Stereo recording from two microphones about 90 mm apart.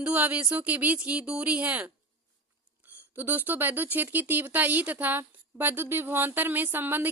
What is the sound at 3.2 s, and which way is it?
Speech, 20° right (ahead or behind).